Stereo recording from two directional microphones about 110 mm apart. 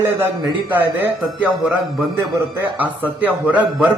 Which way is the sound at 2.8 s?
15° right (ahead or behind).